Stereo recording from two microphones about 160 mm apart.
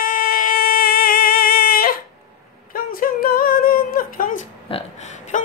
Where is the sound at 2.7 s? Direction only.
65° left (ahead or behind).